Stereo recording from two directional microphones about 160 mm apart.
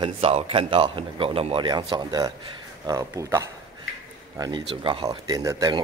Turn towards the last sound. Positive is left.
turn(degrees=-20)  # may be behind; listen again after turning